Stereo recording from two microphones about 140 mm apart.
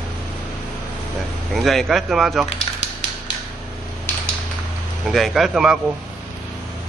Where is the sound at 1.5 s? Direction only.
Centre (ahead or behind).